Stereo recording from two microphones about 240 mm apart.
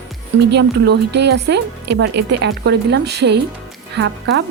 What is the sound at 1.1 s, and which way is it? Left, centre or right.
Speech, right.